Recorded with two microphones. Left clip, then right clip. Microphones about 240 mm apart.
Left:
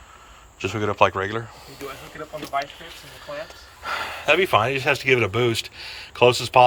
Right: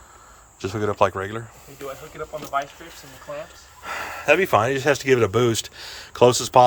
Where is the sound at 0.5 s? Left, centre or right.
Right.